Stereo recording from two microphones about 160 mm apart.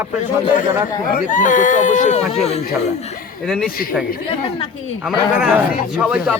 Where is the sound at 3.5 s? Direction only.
5° left (ahead or behind).